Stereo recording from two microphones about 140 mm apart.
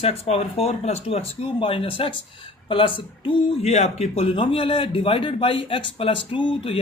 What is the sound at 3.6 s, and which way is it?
A man's voice, 50° left (ahead or behind).